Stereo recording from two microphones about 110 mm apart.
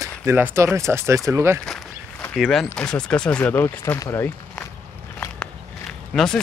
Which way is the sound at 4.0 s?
35° left (ahead or behind).